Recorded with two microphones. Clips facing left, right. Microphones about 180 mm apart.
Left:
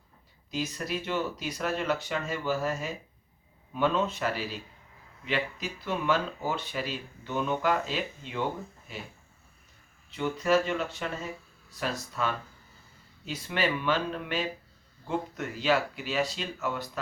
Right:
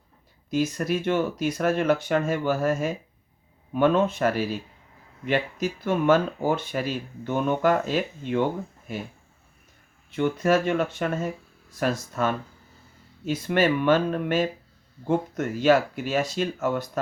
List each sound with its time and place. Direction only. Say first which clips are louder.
0.5 s speech: right 8 dB; 50° right (ahead or behind)
10.1 s speech: right 4 dB; 50° right (ahead or behind)